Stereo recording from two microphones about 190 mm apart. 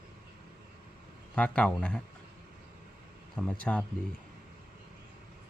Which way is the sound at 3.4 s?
5° left (ahead or behind).